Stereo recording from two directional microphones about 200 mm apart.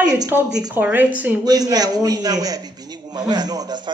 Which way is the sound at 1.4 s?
20° right (ahead or behind).